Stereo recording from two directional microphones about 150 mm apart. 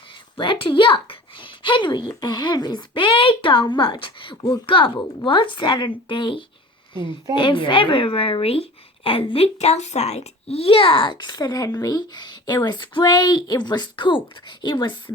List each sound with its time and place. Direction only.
0.3 s a woman's voice: 35° left (ahead or behind)